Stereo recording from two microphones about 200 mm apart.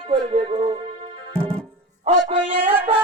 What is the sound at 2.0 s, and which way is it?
Speech, 25° right (ahead or behind).